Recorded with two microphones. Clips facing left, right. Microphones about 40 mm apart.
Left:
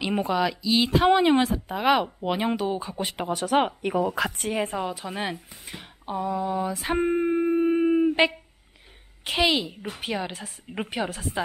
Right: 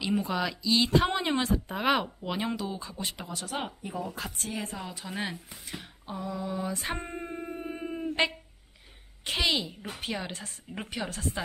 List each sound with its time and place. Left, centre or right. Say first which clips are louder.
0.3 s speech: left 5 dB; centre
1.1 s speech: left 10 dB; left
1.4 s speech: left 4 dB; centre
2.2 s speech: left 7 dB; left
3.2 s speech: left 16 dB; left
4.4 s a woman's voice: left 9 dB; left
4.8 s a woman's voice: left 6 dB; centre
6.7 s speech: left 6 dB; centre
7.0 s a sound: left 15 dB; left
9.2 s a woman's voice: left 5 dB; centre
9.7 s a woman's voice: left 4 dB; centre
10.7 s a woman's voice: left 6 dB; centre